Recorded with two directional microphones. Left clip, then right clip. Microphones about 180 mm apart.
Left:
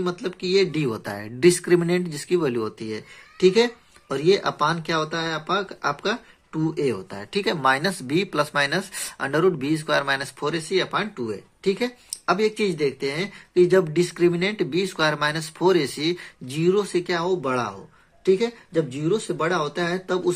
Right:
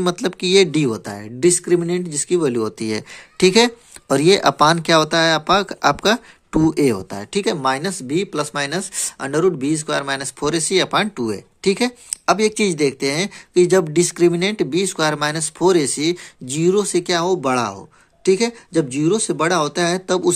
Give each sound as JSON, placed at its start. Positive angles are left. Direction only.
{"t": 0.0, "sound": "speech", "side_deg": -45}
{"t": 2.8, "sound": "speech", "side_deg": -45}
{"t": 7.5, "sound": "speech", "side_deg": -20}
{"t": 10.5, "sound": "speech", "side_deg": -40}